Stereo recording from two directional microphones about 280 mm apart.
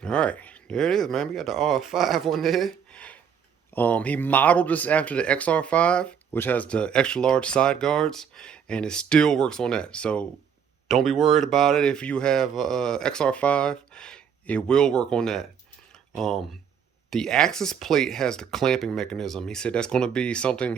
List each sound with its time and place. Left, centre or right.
0.0 s speech: centre